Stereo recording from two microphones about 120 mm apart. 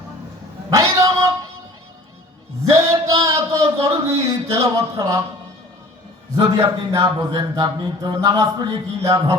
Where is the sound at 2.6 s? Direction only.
25° right (ahead or behind).